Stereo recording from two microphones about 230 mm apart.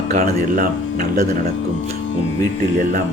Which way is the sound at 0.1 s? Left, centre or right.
Right.